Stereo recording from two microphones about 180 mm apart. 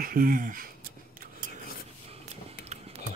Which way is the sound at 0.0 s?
50° right (ahead or behind).